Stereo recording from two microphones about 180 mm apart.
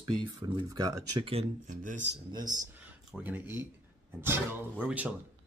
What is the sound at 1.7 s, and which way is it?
Speech, 45° right (ahead or behind).